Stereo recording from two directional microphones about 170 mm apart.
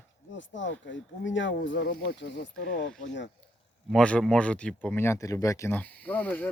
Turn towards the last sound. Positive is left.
turn(degrees=10)  # may be behind; listen again after turning